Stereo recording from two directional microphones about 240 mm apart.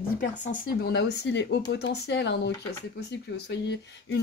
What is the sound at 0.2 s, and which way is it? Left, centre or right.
Speech, left.